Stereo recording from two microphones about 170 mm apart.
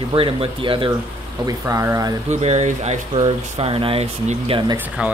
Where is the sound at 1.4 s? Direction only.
20° right (ahead or behind).